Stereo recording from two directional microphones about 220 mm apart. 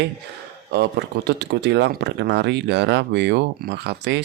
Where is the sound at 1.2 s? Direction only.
50° right (ahead or behind).